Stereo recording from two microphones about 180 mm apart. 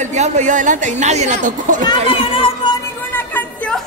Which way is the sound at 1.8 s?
30° left (ahead or behind).